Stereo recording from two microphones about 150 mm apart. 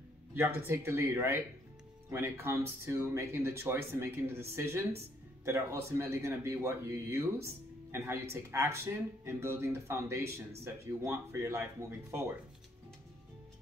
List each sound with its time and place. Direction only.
0.3 s speech: 15° right (ahead or behind)